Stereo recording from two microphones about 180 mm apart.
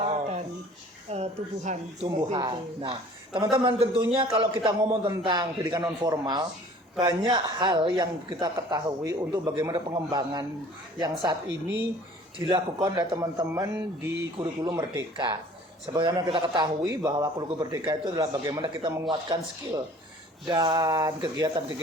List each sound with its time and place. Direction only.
0.0 s a sound: 35° right (ahead or behind)
1.1 s speech: 35° right (ahead or behind)
2.0 s a man's voice: 20° right (ahead or behind)
4.8 s speech: 15° right (ahead or behind)
20.5 s speech: 25° right (ahead or behind)